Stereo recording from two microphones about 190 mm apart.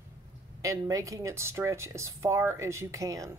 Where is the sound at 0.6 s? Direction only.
15° right (ahead or behind).